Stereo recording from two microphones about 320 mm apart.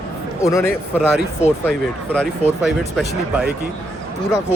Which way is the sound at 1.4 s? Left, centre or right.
Left.